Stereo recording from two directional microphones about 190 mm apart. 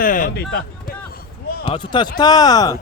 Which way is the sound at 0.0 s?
45° left (ahead or behind).